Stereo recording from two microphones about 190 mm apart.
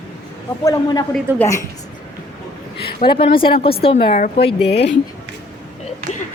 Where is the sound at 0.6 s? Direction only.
20° left (ahead or behind).